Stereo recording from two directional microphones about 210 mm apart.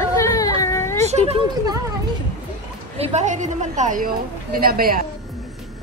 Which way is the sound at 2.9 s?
30° right (ahead or behind).